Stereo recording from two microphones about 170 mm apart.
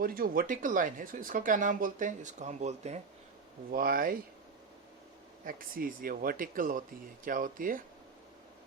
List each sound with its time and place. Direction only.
0.0 s speech: 60° right (ahead or behind); by 3.0 s 40° right (ahead or behind)
3.7 s speech: 55° right (ahead or behind)
5.5 s speech: 55° right (ahead or behind)